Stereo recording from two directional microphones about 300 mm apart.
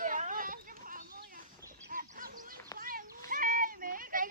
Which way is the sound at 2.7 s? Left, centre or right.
Right.